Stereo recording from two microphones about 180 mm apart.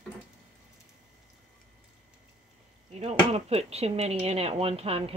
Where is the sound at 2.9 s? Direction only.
35° right (ahead or behind).